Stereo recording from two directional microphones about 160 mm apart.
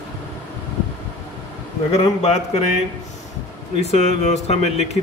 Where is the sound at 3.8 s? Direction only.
40° left (ahead or behind).